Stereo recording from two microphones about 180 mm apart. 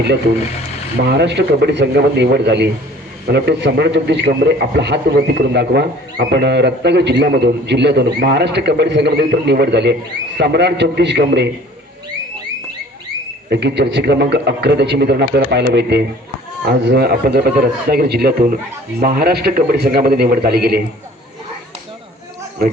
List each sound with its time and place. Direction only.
1.0 s a man's voice: 70° right (ahead or behind)
13.5 s a man's voice: 70° right (ahead or behind)